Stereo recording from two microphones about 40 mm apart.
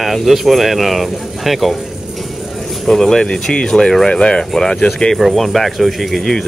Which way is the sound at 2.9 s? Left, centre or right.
Centre.